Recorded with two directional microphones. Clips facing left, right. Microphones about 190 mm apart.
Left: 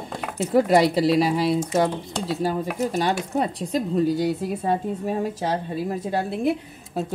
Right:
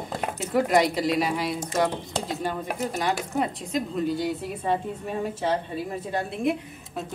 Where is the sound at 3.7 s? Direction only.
35° left (ahead or behind).